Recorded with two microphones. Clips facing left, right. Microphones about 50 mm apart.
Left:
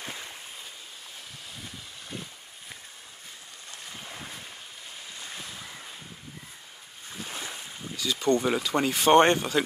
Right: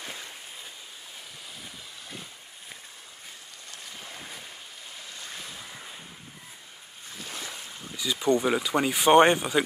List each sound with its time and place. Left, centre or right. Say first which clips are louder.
7.2 s boat: even; left
7.9 s speech: even; centre